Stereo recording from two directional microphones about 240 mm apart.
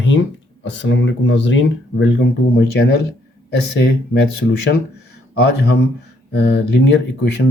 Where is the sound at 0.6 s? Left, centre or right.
Left.